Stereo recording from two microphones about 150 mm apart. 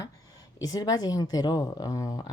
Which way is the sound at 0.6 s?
25° left (ahead or behind).